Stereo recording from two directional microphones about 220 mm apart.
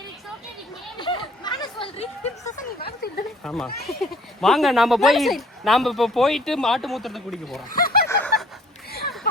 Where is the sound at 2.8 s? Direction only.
45° left (ahead or behind).